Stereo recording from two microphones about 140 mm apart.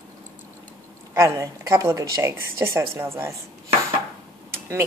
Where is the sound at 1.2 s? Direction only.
20° right (ahead or behind).